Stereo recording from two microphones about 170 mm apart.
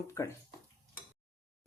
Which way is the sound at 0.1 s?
15° left (ahead or behind).